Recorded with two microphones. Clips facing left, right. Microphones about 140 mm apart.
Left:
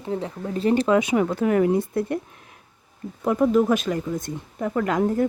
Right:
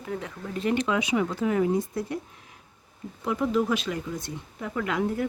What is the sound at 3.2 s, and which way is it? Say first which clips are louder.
Speech: left 6 dB; 50° left (ahead or behind).